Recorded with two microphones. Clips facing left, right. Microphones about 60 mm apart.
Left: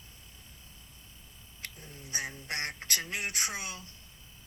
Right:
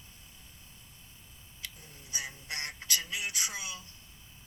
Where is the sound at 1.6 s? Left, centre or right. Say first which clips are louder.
Left 2 dB; left.